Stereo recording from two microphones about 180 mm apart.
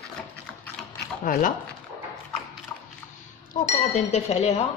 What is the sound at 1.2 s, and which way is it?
Speech, 50° left (ahead or behind).